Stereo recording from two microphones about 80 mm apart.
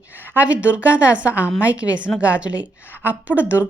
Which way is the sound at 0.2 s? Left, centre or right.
Centre.